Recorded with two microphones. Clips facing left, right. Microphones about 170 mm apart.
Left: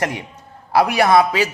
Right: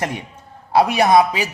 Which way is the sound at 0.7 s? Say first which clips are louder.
Even; 20° right (ahead or behind).